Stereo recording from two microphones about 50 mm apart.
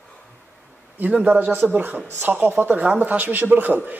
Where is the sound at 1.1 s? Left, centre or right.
Right.